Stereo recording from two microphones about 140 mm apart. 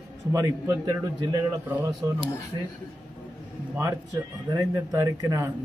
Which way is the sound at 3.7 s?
20° right (ahead or behind).